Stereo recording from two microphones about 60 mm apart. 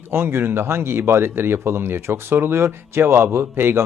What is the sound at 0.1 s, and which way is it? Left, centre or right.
Speech, right.